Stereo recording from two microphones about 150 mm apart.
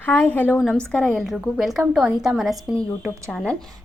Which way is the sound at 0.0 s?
10° left (ahead or behind).